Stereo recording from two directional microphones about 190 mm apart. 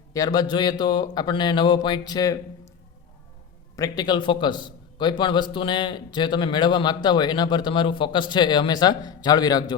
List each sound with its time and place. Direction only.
0.1 s a man's voice: 20° left (ahead or behind)
3.8 s a man's voice: 20° left (ahead or behind)